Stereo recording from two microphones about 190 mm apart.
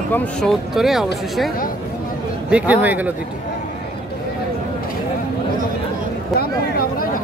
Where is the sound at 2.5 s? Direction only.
5° right (ahead or behind).